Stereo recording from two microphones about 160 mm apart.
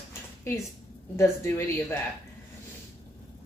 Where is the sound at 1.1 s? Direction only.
15° left (ahead or behind).